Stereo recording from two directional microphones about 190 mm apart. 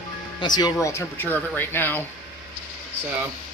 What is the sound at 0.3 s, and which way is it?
Speech, 20° left (ahead or behind).